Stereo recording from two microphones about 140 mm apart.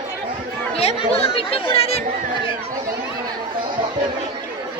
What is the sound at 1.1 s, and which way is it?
Speech, 45° left (ahead or behind).